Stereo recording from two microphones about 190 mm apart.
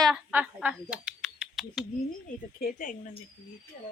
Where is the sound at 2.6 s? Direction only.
45° left (ahead or behind).